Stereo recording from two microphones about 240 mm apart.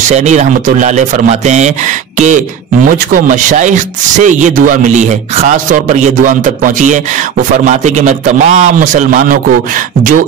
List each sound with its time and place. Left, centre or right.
0.1 s a man's voice: right